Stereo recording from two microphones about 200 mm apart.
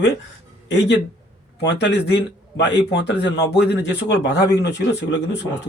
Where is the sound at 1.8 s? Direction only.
55° left (ahead or behind).